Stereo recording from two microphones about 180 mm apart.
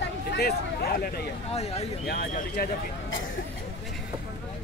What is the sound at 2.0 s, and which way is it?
A man's voice, 60° left (ahead or behind).